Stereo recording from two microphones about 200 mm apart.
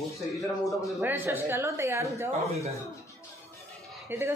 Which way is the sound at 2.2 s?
30° right (ahead or behind).